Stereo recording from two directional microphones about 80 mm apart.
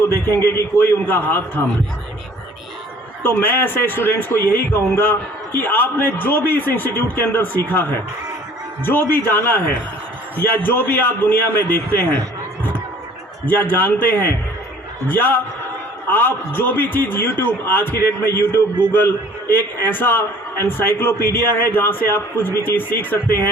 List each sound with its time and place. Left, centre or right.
0.0 s a man's voice: left
3.2 s a man's voice: left
13.5 s a man's voice: left